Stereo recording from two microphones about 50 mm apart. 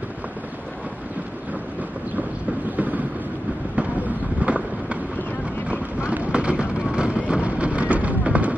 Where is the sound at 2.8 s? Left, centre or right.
Right.